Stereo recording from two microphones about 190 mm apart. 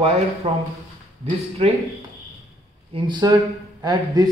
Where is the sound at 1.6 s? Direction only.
35° right (ahead or behind).